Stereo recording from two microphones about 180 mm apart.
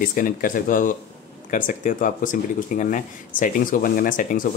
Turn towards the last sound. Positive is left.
turn(degrees=50)  # may be behind; listen again after turning